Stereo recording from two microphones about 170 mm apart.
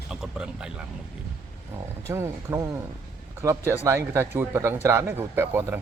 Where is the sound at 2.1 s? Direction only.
15° right (ahead or behind).